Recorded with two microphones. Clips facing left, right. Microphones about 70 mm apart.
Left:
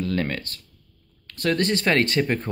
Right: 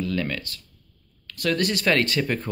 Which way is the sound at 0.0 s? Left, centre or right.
Left.